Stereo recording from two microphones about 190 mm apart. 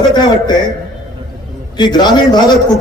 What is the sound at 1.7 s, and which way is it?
Speech, 25° left (ahead or behind).